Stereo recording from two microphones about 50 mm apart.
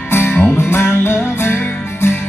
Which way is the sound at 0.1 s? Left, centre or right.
Left.